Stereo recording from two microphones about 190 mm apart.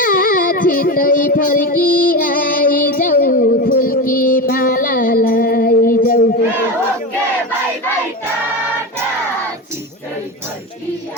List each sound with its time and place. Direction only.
0.0 s music: 45° left (ahead or behind)